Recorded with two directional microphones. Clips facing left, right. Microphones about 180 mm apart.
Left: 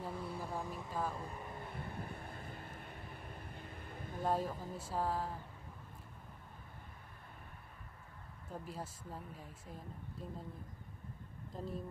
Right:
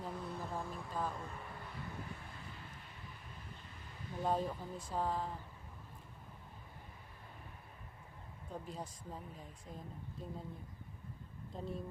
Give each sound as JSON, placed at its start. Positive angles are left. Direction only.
{"t": 0.0, "sound": "a sound", "side_deg": 10}
{"t": 1.7, "sound": "vehicle", "side_deg": 55}
{"t": 4.2, "sound": "speech", "side_deg": 5}
{"t": 8.6, "sound": "speech", "side_deg": 5}
{"t": 11.5, "sound": "speech", "side_deg": 0}